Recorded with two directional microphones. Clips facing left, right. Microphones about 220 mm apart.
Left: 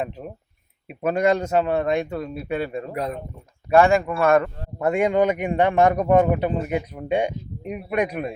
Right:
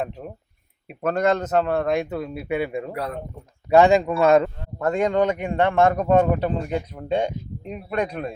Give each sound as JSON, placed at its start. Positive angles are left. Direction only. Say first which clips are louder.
{"t": 0.2, "sound": "speech", "louder": "even", "side_deg": 0}
{"t": 2.9, "sound": "speech", "louder": "left 2 dB", "side_deg": 20}
{"t": 3.7, "sound": "speech", "louder": "right 1 dB", "side_deg": -20}
{"t": 4.8, "sound": "a man's voice", "louder": "left 1 dB", "side_deg": 15}